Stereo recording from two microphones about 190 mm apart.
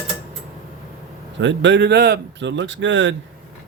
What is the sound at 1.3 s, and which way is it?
Speech, 75° right (ahead or behind).